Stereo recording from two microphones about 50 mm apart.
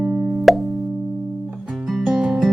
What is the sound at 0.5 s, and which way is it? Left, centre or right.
Music, centre.